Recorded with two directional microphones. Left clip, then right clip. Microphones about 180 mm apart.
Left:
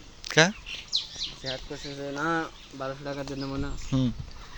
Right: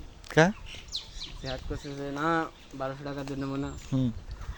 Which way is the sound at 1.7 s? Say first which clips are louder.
Left 1 dB; 25° right (ahead or behind).